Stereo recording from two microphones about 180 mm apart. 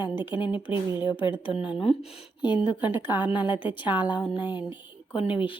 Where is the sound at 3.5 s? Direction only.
25° left (ahead or behind).